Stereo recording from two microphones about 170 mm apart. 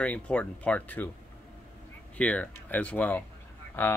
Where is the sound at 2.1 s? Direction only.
5° left (ahead or behind).